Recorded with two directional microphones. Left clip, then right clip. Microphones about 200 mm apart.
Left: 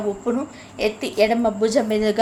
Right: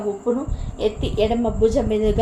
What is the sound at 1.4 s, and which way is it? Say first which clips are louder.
Speech: right 1 dB; 20° left (ahead or behind).